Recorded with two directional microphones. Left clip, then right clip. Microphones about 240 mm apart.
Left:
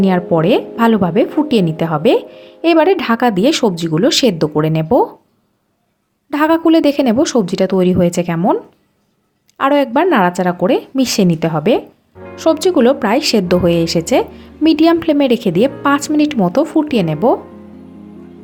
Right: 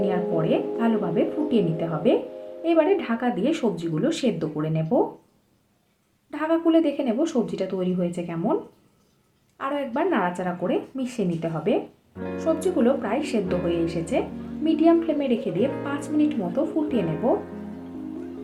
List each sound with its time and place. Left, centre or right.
0.0 s speech: left
6.3 s speech: left
9.6 s speech: left